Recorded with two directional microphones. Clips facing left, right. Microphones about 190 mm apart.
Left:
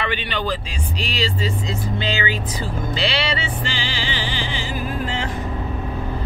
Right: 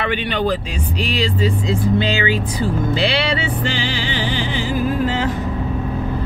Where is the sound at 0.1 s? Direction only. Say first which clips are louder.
Right 5 dB; 55° right (ahead or behind).